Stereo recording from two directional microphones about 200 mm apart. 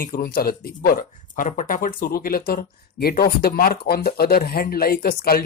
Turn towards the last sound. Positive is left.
turn(degrees=50)  # may be behind; listen again after turning